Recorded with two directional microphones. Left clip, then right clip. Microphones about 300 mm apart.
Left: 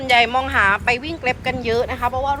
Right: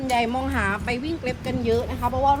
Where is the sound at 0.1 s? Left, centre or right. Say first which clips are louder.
Left 8 dB; centre.